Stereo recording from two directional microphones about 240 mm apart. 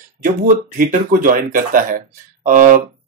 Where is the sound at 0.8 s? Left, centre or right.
Right.